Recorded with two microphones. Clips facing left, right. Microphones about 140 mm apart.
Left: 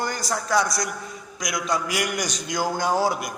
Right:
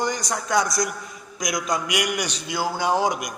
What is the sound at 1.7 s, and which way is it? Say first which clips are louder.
A man's voice: left 1 dB; 15° right (ahead or behind).